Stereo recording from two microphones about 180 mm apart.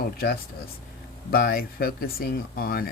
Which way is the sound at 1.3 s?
55° left (ahead or behind).